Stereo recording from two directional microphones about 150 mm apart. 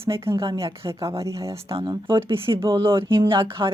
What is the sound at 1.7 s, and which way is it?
Speech, 30° right (ahead or behind).